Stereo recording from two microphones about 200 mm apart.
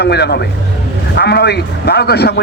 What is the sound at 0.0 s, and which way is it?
A man's voice, 55° left (ahead or behind).